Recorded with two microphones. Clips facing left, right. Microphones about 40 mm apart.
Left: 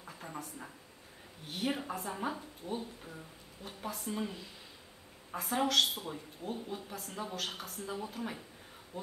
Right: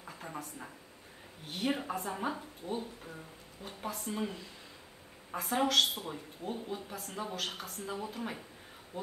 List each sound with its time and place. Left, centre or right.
0.0 s a sound: centre
1.5 s a woman's voice: centre
8.9 s speech: right